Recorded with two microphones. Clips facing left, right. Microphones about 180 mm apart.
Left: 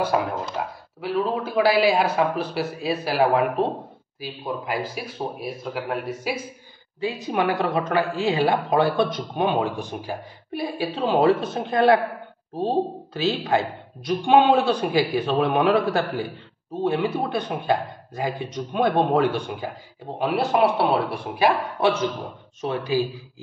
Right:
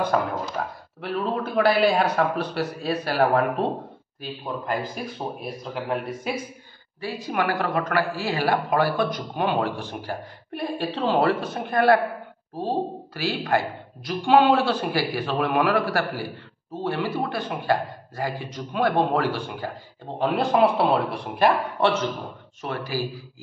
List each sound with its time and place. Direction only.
0.0 s a man's voice: 5° left (ahead or behind)
7.0 s a woman's voice: 20° left (ahead or behind)
20.2 s a woman's voice: 5° left (ahead or behind)